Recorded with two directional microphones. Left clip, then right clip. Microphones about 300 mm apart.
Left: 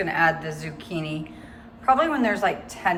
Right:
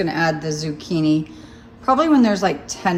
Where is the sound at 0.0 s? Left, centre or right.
Centre.